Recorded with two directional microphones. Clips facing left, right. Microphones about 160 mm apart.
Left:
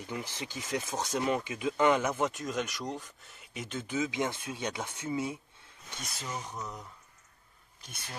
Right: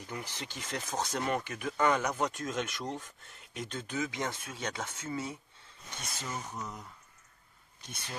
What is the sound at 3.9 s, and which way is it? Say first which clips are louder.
Speech: left 4 dB; 15° left (ahead or behind).